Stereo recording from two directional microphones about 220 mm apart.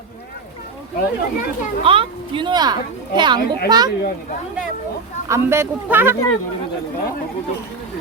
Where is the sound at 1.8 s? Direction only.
25° right (ahead or behind).